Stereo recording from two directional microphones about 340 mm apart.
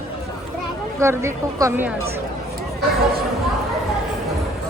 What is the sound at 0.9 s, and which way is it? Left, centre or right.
A woman's voice, centre.